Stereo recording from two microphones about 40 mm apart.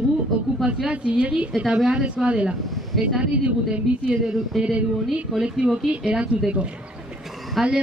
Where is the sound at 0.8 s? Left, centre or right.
Right.